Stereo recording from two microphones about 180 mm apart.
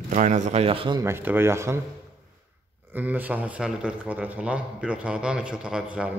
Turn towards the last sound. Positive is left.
turn(degrees=-5)  # may be behind; listen again after turning